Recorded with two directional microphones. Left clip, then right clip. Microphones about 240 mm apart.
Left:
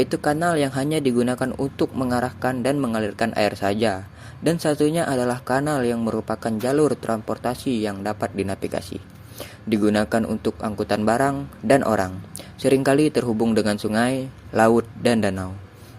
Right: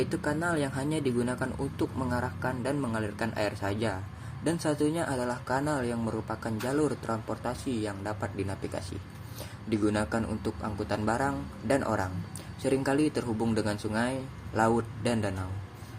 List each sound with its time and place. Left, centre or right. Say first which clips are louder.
0.0 s speech: left 9 dB; left